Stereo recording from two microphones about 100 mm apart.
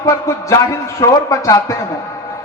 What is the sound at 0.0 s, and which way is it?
A man's voice, 35° left (ahead or behind).